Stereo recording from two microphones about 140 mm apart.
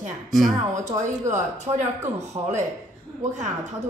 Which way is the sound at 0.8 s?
60° right (ahead or behind).